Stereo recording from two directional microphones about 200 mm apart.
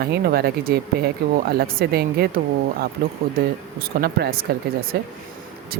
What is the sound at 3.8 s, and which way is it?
Speech, 50° right (ahead or behind).